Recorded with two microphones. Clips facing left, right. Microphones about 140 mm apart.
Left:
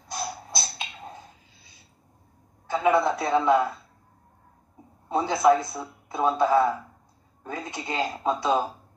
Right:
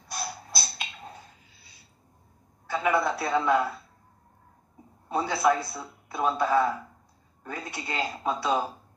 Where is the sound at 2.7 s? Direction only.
20° left (ahead or behind).